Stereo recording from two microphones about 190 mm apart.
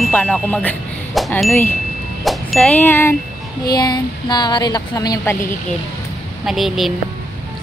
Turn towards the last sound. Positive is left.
turn(degrees=0)  # may be behind; listen again after turning